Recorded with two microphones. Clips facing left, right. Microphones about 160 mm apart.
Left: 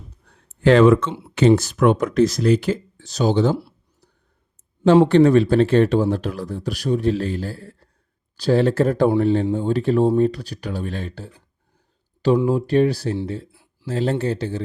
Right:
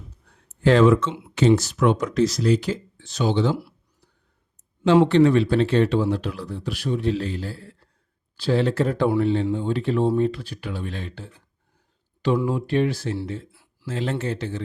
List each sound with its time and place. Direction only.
0.6 s speech: 65° left (ahead or behind)
3.0 s speech: 40° left (ahead or behind)
3.5 s speech: 30° left (ahead or behind)
5.0 s speech: 45° left (ahead or behind)
12.5 s speech: 40° left (ahead or behind)